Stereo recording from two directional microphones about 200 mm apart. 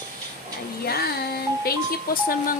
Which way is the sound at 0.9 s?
50° left (ahead or behind).